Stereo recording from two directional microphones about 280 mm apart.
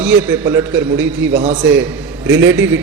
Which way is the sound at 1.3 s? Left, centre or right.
Right.